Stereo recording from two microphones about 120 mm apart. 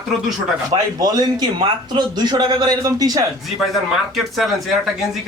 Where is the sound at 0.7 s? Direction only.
30° right (ahead or behind).